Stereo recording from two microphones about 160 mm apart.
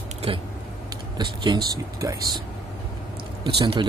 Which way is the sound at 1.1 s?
30° right (ahead or behind).